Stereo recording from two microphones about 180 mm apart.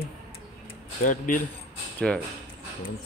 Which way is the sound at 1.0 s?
45° left (ahead or behind).